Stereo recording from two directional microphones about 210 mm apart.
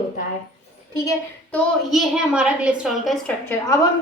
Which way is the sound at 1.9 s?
5° right (ahead or behind).